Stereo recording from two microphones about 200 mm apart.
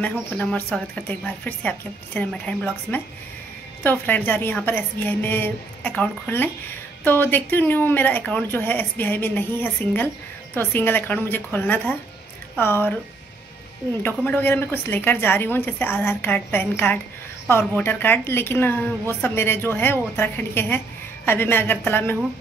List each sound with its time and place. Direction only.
0.0 s a woman's voice: 10° left (ahead or behind)
14.0 s a woman's voice: 10° left (ahead or behind)